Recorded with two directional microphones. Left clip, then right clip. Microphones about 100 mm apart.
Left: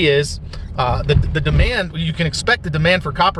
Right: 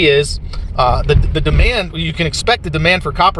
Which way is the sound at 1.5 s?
25° left (ahead or behind).